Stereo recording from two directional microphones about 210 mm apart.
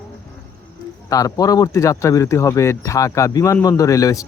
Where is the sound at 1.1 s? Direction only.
15° left (ahead or behind).